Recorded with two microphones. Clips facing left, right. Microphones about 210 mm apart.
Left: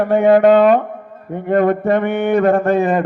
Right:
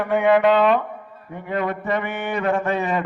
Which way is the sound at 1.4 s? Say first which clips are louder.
Left 10 dB; 50° left (ahead or behind).